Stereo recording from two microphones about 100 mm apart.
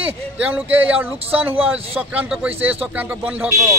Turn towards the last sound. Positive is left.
turn(degrees=-15)  # may be behind; listen again after turning